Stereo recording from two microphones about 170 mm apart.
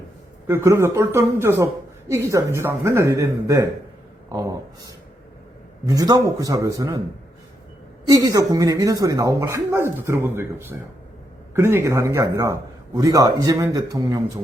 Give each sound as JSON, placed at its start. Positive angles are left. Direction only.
{"t": 0.4, "sound": "a man's voice", "side_deg": -15}
{"t": 4.3, "sound": "a sound", "side_deg": -20}
{"t": 5.8, "sound": "a man's voice", "side_deg": -20}
{"t": 8.1, "sound": "a man's voice", "side_deg": -20}